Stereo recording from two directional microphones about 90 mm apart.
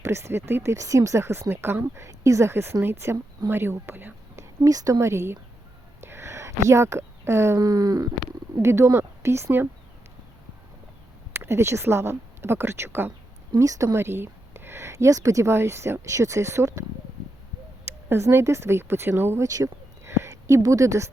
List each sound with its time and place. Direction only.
0.0 s a woman's voice: 30° right (ahead or behind)
4.6 s a woman's voice: 40° right (ahead or behind)
6.0 s a sound: 30° right (ahead or behind)
7.6 s groan: 50° right (ahead or behind)
8.6 s speech: 30° right (ahead or behind)
11.3 s speech: 30° right (ahead or behind)
13.6 s a woman's voice: 35° right (ahead or behind)
17.8 s speech: 25° right (ahead or behind)
19.5 s a sound: 35° right (ahead or behind)